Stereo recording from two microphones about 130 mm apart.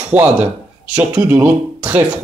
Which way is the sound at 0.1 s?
15° right (ahead or behind).